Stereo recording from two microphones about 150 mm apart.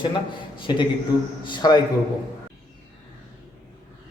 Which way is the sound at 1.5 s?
30° left (ahead or behind).